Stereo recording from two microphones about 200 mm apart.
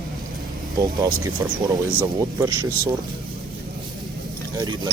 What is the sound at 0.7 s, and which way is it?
Speech, 20° right (ahead or behind).